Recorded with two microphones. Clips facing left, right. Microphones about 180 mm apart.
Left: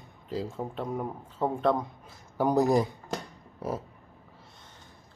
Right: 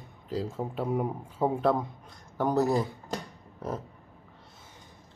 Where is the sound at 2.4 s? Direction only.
15° left (ahead or behind).